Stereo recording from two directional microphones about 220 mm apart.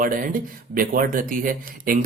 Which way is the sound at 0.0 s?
40° right (ahead or behind).